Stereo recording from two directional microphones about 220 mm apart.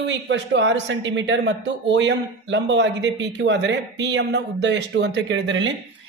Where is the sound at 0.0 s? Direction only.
55° right (ahead or behind).